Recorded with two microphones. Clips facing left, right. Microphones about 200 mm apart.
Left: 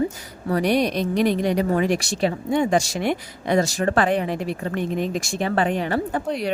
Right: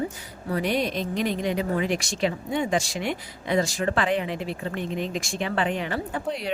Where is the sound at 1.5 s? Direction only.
45° left (ahead or behind).